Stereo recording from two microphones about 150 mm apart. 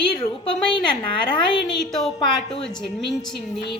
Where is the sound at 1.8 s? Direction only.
Centre (ahead or behind).